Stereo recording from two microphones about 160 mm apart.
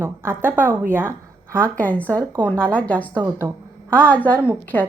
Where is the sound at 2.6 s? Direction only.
10° left (ahead or behind).